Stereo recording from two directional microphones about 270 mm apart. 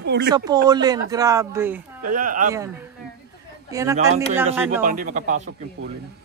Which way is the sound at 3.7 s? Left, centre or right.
Centre.